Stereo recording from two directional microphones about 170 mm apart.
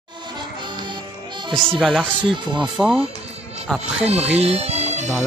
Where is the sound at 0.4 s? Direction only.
25° right (ahead or behind).